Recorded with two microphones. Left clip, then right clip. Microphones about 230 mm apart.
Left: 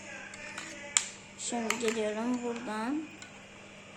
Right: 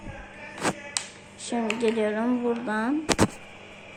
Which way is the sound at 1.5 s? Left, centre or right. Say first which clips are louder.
Right 6 dB; centre.